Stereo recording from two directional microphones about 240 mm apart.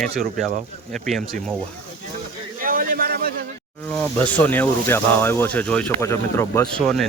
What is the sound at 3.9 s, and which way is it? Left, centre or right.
Speech, centre.